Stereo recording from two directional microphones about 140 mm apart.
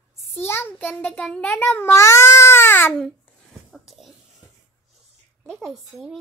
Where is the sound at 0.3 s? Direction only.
15° left (ahead or behind).